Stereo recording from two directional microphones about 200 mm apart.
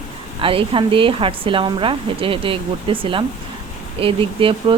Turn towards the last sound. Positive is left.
turn(degrees=-25)  # may be behind; listen again after turning